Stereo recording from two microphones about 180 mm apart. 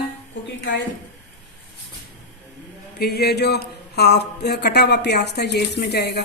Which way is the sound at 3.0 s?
60° left (ahead or behind).